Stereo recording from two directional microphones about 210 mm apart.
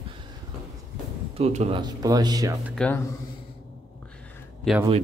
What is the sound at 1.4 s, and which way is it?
Speech, 30° right (ahead or behind).